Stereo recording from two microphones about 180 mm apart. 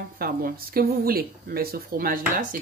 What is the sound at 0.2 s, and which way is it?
Speech, 55° right (ahead or behind).